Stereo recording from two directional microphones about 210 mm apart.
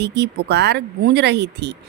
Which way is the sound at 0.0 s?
50° right (ahead or behind).